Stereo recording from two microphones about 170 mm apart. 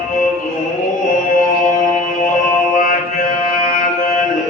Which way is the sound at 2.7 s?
50° left (ahead or behind).